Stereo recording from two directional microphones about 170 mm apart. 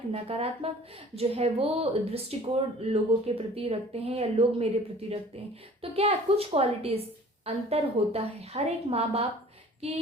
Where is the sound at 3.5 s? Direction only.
35° right (ahead or behind).